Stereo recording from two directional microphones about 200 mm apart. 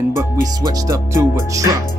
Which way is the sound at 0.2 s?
20° right (ahead or behind).